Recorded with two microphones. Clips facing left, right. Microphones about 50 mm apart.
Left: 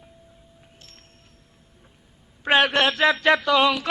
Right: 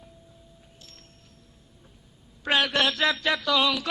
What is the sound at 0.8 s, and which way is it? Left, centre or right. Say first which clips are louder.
Music: even; left.